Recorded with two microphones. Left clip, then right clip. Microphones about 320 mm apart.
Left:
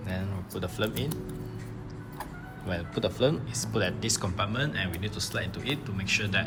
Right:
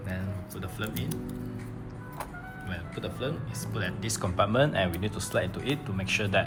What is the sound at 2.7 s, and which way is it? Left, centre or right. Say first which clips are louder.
Speech: left 8 dB; centre.